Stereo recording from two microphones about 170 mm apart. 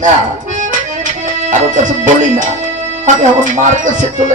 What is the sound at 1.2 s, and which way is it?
Music, 45° right (ahead or behind).